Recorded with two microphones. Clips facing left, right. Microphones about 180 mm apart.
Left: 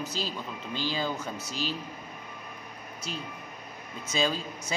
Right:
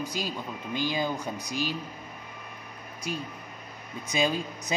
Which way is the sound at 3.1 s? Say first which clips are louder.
Right 4 dB; 15° right (ahead or behind).